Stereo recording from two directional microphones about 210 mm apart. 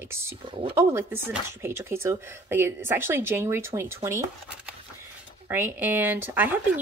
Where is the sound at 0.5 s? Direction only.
25° right (ahead or behind).